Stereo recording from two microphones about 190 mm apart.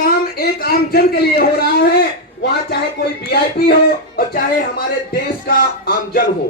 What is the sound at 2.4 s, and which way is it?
Speech, 55° left (ahead or behind).